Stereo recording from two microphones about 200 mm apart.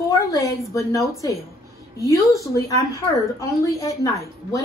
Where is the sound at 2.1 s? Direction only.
15° left (ahead or behind).